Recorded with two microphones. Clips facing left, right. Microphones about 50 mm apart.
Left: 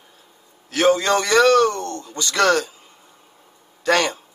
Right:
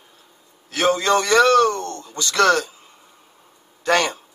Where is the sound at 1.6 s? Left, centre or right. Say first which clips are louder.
Even; right.